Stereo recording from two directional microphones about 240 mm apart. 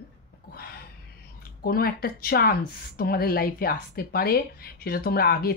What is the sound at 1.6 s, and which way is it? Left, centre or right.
Speech, left.